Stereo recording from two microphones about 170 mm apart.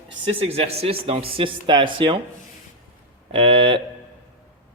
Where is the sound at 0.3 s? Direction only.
35° right (ahead or behind).